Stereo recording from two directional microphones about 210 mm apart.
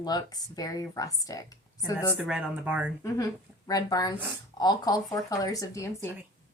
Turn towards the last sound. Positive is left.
turn(degrees=15)  # may be behind; listen again after turning